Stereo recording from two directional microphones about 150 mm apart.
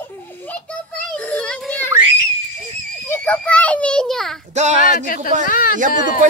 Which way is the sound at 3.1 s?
10° left (ahead or behind).